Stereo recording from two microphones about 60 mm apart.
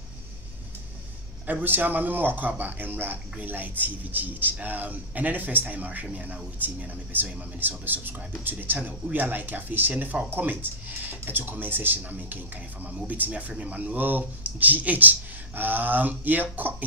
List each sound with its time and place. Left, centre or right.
1.4 s speech: right